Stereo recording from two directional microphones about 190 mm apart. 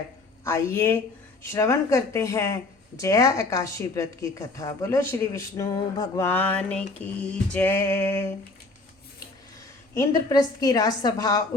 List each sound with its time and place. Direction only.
0.4 s a woman's voice: 15° left (ahead or behind)
9.9 s a woman's voice: 15° left (ahead or behind)